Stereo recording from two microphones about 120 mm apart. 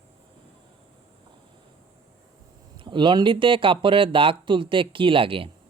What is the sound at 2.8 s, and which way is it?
Speech, 40° right (ahead or behind).